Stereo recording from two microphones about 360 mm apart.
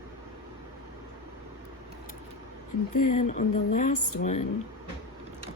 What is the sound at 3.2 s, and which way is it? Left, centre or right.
Speech, centre.